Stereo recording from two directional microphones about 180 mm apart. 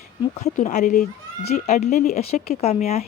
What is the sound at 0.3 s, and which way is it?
Speech, 40° left (ahead or behind).